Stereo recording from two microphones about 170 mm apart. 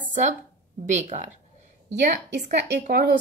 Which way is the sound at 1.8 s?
75° right (ahead or behind).